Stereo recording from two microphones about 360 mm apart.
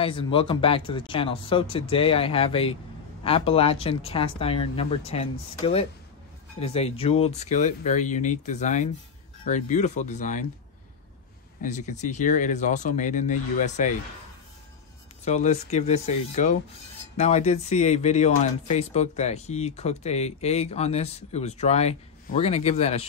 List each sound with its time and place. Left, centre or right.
0.0 s speech: centre
11.6 s speech: centre
15.2 s speech: centre